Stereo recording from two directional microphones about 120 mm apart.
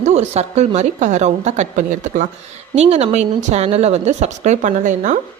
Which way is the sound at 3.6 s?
60° right (ahead or behind).